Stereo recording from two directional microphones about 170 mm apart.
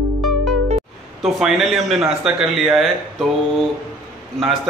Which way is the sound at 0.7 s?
Centre (ahead or behind).